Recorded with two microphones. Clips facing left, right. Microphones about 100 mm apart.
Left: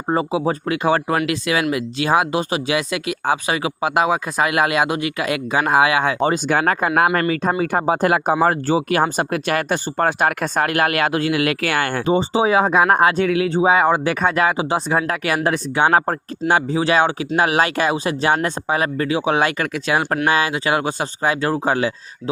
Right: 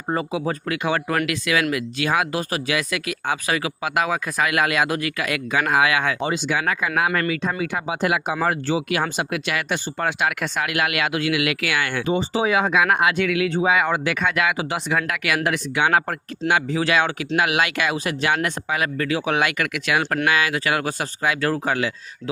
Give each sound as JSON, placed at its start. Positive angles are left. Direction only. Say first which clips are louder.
{"t": 0.1, "sound": "speech", "louder": "left 4 dB", "side_deg": 30}
{"t": 6.1, "sound": "speech", "louder": "left 5 dB", "side_deg": 50}
{"t": 12.0, "sound": "speech", "louder": "left 5 dB", "side_deg": 30}